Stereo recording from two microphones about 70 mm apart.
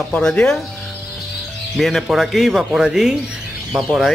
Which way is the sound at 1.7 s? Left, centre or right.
Centre.